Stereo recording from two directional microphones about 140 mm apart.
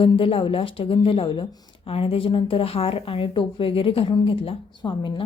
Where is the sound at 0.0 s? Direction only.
40° left (ahead or behind).